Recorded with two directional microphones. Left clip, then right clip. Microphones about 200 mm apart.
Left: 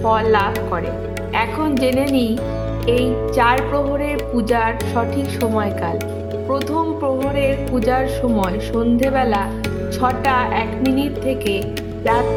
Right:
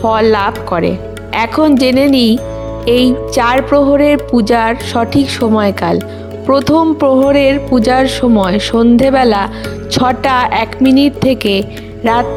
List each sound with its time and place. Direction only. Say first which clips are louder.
0.1 s speech: right 4 dB; 50° right (ahead or behind)